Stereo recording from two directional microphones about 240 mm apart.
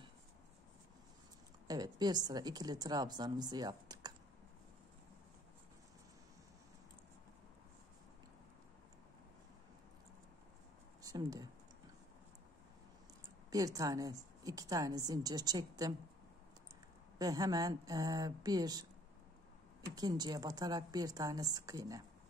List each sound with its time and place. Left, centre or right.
1.7 s a woman's voice: centre
11.0 s speech: centre
13.5 s a woman's voice: centre
17.2 s a woman's voice: centre
20.0 s a woman's voice: centre